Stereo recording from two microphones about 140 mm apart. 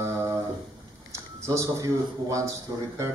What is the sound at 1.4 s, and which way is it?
A man's voice, 20° right (ahead or behind).